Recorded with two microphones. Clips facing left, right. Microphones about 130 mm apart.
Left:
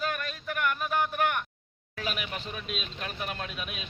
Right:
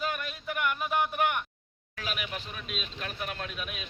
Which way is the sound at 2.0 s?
Centre (ahead or behind).